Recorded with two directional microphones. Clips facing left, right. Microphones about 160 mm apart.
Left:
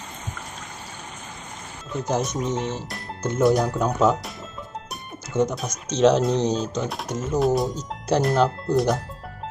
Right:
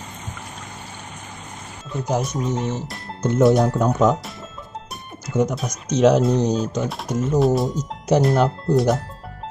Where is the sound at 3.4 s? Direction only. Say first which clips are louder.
Right 3 dB; centre (ahead or behind).